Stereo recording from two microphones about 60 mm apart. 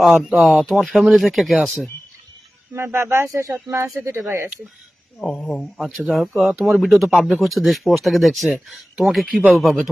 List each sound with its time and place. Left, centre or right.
0.3 s speech: centre
2.7 s speech: right
4.0 s speech: right
5.7 s speech: centre